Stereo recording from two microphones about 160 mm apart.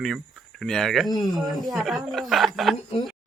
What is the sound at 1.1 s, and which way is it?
Speech, 25° left (ahead or behind).